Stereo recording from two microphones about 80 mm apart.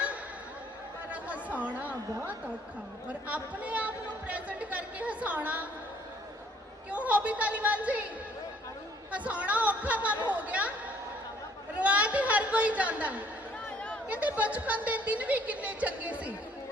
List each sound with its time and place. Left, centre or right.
1.1 s chatter: centre
3.1 s speech: centre
6.9 s speech: centre
9.1 s speech: centre
10.3 s a sound: centre
11.8 s speech: centre
13.7 s chatter: centre
14.1 s speech: centre